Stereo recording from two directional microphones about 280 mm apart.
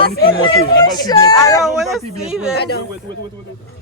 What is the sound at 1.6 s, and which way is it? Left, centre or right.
Speech, centre.